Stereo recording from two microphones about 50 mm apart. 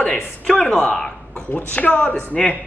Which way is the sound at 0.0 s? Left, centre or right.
Centre.